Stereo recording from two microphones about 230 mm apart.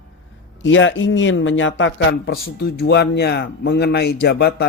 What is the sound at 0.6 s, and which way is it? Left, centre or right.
Speech, left.